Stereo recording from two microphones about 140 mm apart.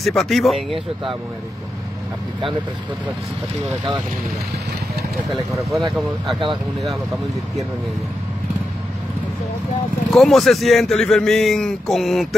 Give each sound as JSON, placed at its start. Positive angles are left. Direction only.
{"t": 0.0, "sound": "speech", "side_deg": 0}
{"t": 5.5, "sound": "speech", "side_deg": 0}
{"t": 6.2, "sound": "speech", "side_deg": -35}
{"t": 10.1, "sound": "speech", "side_deg": 0}